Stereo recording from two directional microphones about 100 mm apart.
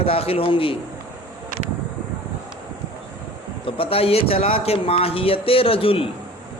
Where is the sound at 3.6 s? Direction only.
70° left (ahead or behind).